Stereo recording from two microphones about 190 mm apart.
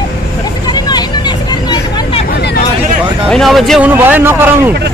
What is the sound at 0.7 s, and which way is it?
Vehicle, 20° left (ahead or behind).